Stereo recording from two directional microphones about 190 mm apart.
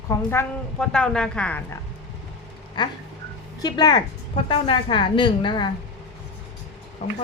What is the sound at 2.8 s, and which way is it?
A woman's voice, 25° left (ahead or behind).